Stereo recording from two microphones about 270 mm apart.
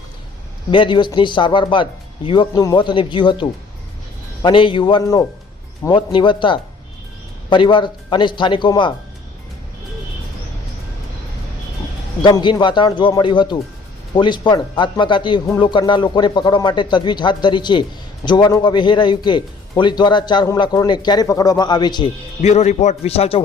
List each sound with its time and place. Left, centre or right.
0.7 s a man's voice: centre
12.2 s a man's voice: centre